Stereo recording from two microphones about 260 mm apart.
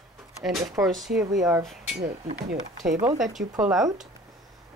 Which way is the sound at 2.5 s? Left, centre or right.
Right.